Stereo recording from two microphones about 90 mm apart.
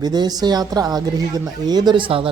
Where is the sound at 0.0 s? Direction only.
50° right (ahead or behind).